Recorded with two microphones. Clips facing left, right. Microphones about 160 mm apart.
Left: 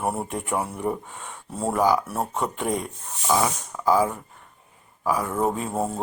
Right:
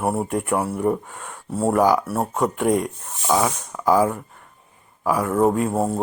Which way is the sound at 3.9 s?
10° right (ahead or behind).